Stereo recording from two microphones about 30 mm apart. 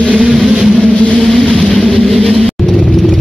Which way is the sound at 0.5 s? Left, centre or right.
Right.